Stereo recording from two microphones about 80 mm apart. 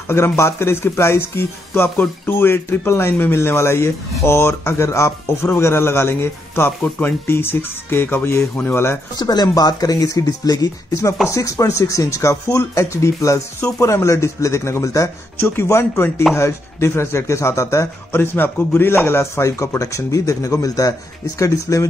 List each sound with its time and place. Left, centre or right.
0.1 s speech: left
9.1 s speech: left
18.1 s speech: left